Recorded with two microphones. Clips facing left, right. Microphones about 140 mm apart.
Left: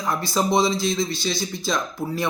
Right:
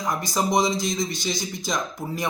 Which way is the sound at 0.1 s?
15° right (ahead or behind).